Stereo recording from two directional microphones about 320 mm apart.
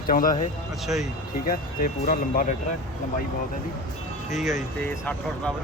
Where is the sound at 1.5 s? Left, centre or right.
Left.